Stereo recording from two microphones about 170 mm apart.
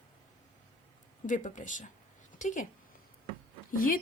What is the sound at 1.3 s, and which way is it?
A woman's voice, 50° left (ahead or behind).